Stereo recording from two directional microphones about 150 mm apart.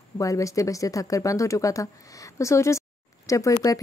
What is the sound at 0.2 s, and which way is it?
A woman's voice, 20° left (ahead or behind).